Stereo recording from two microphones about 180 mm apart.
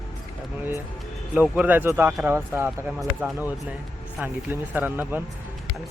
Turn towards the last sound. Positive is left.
turn(degrees=-10)  # may be behind; listen again after turning